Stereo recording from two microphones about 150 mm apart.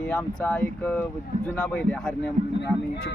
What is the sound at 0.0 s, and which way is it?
Speech, 5° left (ahead or behind).